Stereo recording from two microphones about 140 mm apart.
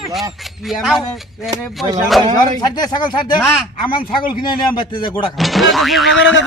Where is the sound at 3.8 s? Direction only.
35° left (ahead or behind).